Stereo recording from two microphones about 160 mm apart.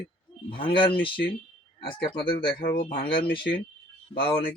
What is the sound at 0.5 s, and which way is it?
Speech, 30° left (ahead or behind).